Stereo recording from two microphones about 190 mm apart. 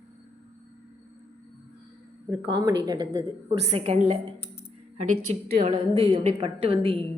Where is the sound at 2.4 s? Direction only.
20° right (ahead or behind).